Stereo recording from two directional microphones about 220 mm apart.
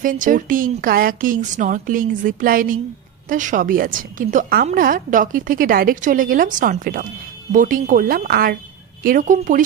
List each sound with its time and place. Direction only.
0.0 s a woman's voice: 40° right (ahead or behind)